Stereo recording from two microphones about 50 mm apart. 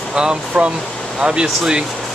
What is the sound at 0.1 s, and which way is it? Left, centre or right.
Speech, centre.